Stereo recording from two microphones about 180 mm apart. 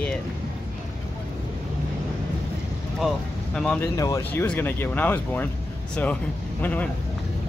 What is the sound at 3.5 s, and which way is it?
Speech, 5° left (ahead or behind).